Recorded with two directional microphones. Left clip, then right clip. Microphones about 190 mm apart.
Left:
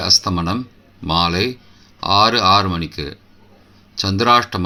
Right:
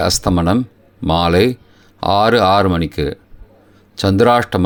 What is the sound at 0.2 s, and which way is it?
Speech, 40° right (ahead or behind).